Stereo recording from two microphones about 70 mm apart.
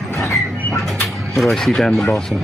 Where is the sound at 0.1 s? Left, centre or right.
Left.